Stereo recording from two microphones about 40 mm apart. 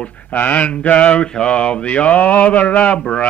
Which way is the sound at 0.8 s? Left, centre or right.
Left.